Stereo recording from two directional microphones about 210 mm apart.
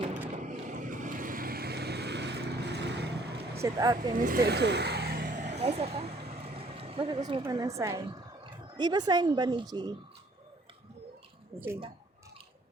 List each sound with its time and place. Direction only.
0.3 s vehicle: 35° right (ahead or behind); by 3.6 s 50° right (ahead or behind)
3.6 s speech: 20° right (ahead or behind)
4.1 s vehicle: 40° right (ahead or behind)
6.6 s a sound: 25° right (ahead or behind)
7.4 s a woman's voice: 15° right (ahead or behind)